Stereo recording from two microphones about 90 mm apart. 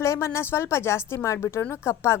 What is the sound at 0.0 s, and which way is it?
A woman's voice, 35° left (ahead or behind).